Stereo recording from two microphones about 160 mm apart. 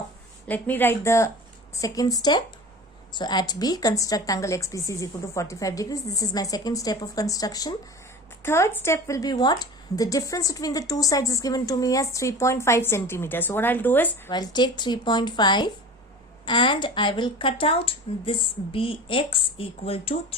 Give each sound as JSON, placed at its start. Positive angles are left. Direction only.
{"t": 0.4, "sound": "a woman's voice", "side_deg": 10}
{"t": 14.3, "sound": "a woman's voice", "side_deg": 25}